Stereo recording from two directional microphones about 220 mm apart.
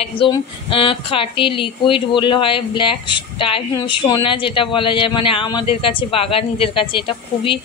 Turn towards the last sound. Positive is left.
turn(degrees=25)  # may be behind; listen again after turning